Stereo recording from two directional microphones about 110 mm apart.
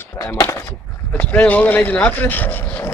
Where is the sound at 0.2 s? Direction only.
30° left (ahead or behind).